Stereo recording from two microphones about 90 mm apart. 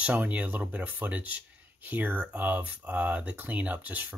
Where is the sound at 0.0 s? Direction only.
20° right (ahead or behind).